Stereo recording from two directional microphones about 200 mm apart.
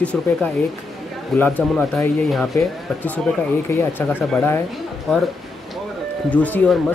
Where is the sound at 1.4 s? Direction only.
5° left (ahead or behind).